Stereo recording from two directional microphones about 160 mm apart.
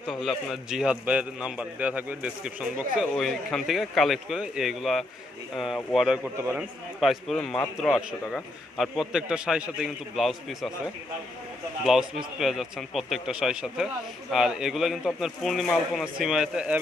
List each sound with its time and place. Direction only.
0.0 s a man's voice: 5° right (ahead or behind)
6.3 s a man's voice: 20° right (ahead or behind)
7.0 s a man's voice: centre (ahead or behind)
11.8 s a man's voice: 5° right (ahead or behind)